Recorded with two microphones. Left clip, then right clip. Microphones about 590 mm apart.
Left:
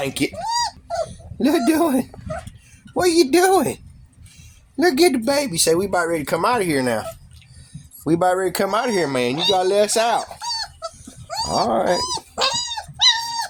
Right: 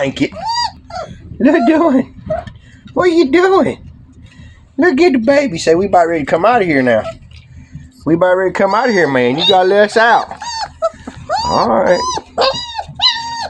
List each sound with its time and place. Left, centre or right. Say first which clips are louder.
0.0 s speech: right 7 dB; left
4.8 s speech: right 6 dB; left
8.0 s speech: right 7 dB; left